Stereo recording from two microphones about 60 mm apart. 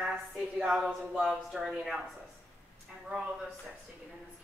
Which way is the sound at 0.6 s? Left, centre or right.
Centre.